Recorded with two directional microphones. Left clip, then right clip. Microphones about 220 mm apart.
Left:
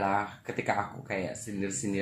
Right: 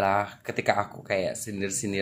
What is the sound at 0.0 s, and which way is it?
Speech, 40° right (ahead or behind).